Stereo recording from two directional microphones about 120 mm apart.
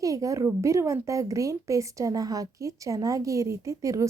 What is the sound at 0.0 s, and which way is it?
Speech, 30° right (ahead or behind).